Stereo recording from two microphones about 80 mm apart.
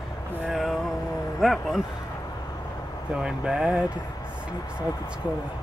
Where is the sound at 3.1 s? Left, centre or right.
Centre.